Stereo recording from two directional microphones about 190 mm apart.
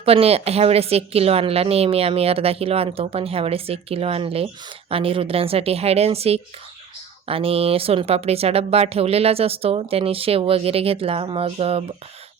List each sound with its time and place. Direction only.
0.0 s speech: 30° right (ahead or behind)